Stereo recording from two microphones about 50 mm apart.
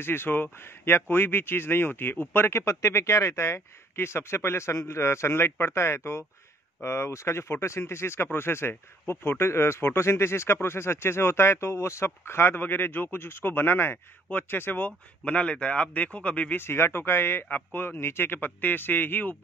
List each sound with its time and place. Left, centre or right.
0.0 s speech: left
2.6 s speech: left
14.9 s speech: left
16.5 s speech: left